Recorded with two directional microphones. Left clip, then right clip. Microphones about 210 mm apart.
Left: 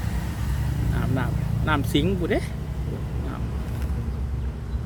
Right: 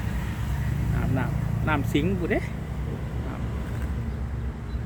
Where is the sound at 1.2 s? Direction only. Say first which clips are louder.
Left 1 dB; 15° left (ahead or behind).